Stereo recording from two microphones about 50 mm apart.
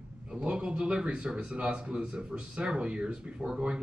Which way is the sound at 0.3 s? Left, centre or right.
Centre.